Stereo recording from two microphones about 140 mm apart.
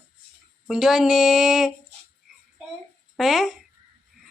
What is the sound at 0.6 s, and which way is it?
A child's voice, 5° right (ahead or behind).